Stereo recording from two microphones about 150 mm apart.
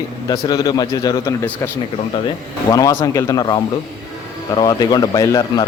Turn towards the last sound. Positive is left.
turn(degrees=25)  # may be behind; listen again after turning